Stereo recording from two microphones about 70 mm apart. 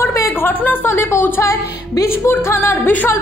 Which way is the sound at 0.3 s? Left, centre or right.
Left.